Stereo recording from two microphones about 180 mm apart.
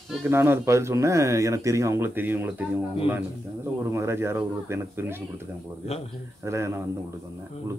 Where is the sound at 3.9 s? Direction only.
15° right (ahead or behind).